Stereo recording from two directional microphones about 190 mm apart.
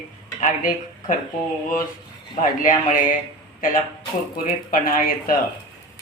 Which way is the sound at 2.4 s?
45° left (ahead or behind).